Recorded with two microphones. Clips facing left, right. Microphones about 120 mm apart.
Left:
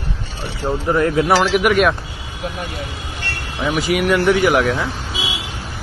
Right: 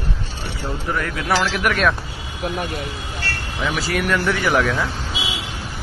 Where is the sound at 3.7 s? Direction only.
10° left (ahead or behind).